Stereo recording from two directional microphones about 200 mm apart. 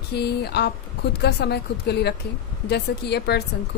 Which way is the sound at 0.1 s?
55° left (ahead or behind).